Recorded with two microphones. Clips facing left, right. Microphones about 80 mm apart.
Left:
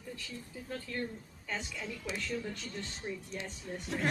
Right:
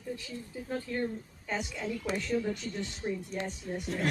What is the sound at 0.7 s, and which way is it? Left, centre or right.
A woman's voice, right.